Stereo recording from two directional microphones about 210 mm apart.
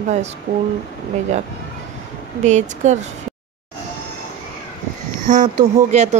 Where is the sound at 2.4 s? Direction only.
35° right (ahead or behind).